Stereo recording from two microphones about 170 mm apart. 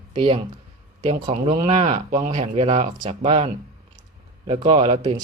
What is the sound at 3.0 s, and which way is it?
Speech, 30° right (ahead or behind).